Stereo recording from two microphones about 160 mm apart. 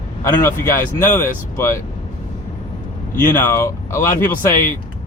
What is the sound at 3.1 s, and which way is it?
Speech, 15° left (ahead or behind).